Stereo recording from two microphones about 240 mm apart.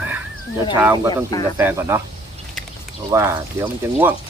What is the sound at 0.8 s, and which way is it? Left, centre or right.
Speech, centre.